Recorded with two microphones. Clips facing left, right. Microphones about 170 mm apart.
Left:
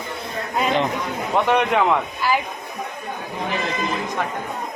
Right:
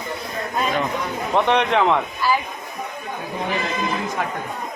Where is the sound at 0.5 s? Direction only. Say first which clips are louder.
Left 2 dB; 20° left (ahead or behind).